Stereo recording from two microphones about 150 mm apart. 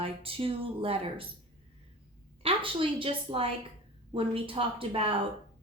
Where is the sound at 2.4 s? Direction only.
35° right (ahead or behind).